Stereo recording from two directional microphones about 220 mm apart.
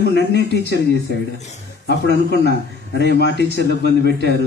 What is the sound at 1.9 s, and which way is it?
A man's voice, 50° left (ahead or behind).